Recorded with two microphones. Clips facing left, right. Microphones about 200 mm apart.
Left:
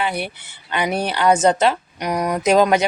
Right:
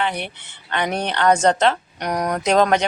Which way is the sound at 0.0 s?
10° left (ahead or behind).